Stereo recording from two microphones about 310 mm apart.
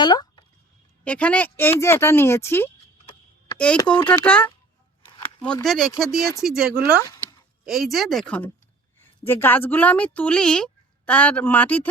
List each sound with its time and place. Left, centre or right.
0.0 s a sound: centre
1.0 s speech: centre
5.0 s a sound: centre
5.5 s speech: centre
6.6 s speech: right
7.6 s speech: centre